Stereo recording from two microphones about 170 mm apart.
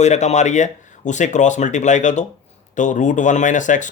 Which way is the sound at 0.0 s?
40° left (ahead or behind).